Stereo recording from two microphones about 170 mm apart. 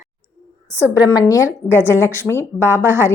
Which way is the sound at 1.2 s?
15° left (ahead or behind).